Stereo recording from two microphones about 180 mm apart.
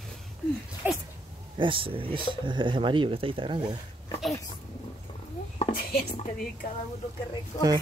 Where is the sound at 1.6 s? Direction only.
30° right (ahead or behind).